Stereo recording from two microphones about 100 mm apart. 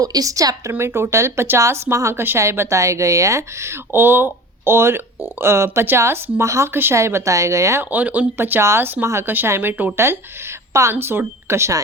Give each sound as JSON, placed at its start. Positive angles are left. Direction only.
{"t": 0.0, "sound": "a woman's voice", "side_deg": -40}
{"t": 7.9, "sound": "speech", "side_deg": -15}